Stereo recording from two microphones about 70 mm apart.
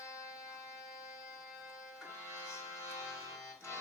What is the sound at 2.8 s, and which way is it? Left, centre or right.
Music, left.